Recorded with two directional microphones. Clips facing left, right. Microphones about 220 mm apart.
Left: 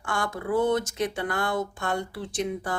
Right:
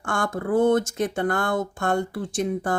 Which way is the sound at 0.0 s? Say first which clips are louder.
Right 4 dB; 50° right (ahead or behind).